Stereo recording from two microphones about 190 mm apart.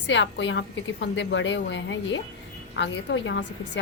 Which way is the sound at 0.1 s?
75° left (ahead or behind).